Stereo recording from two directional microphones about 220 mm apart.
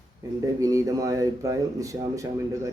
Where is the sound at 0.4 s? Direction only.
15° right (ahead or behind).